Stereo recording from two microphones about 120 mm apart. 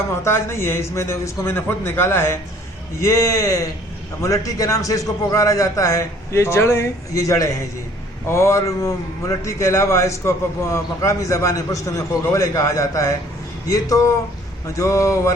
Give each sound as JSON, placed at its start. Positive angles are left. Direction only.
{"t": 0.3, "sound": "a man's voice", "side_deg": 20}